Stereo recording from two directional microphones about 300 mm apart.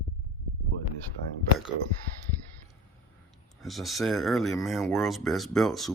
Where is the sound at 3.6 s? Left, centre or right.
Centre.